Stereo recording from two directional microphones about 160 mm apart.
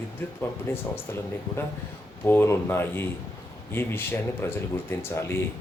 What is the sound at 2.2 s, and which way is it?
Speech, 15° left (ahead or behind).